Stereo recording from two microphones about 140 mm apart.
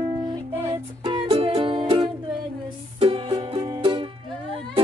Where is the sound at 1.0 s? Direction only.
35° right (ahead or behind).